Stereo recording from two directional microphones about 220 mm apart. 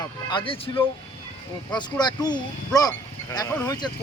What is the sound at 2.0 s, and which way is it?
Speech, 20° left (ahead or behind).